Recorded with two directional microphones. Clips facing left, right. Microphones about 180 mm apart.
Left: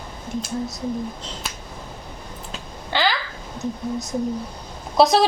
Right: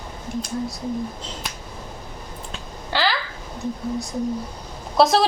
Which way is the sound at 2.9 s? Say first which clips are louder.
Left 1 dB; 5° right (ahead or behind).